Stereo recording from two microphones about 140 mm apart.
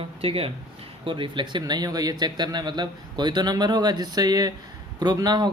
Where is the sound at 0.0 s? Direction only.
40° right (ahead or behind).